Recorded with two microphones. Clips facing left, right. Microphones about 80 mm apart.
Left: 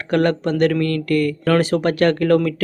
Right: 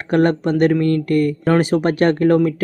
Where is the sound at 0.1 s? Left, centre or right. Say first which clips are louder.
Right 2 dB; right.